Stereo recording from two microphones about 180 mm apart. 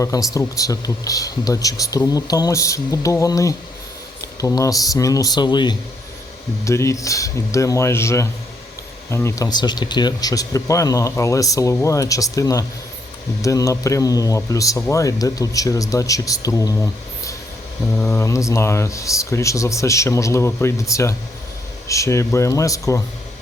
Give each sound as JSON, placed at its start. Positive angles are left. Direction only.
{"t": 0.0, "sound": "a man's voice", "side_deg": 20}